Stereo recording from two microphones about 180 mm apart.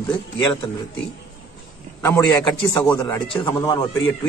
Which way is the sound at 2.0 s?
15° left (ahead or behind).